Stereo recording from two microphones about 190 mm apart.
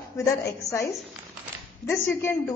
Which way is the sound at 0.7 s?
15° left (ahead or behind).